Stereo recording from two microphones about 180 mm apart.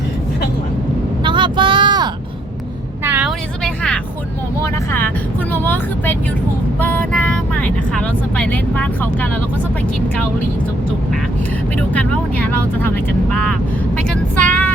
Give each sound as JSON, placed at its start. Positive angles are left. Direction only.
{"t": 1.2, "sound": "a sound", "side_deg": -25}
{"t": 3.0, "sound": "vehicle", "side_deg": -10}
{"t": 3.6, "sound": "vehicle", "side_deg": 5}
{"t": 4.6, "sound": "speech", "side_deg": 10}
{"t": 6.7, "sound": "vehicle", "side_deg": 10}
{"t": 11.8, "sound": "speech", "side_deg": 5}
{"t": 14.1, "sound": "vehicle", "side_deg": 5}